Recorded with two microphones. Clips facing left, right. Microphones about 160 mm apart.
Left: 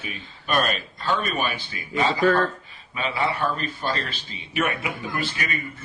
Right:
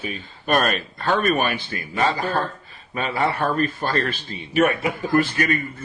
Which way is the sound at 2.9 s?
45° right (ahead or behind).